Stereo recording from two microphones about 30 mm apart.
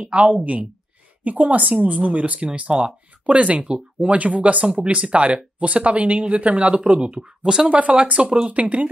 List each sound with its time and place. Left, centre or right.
0.0 s speech: right
0.3 s speech: right
6.9 s speech: right
8.5 s speech: right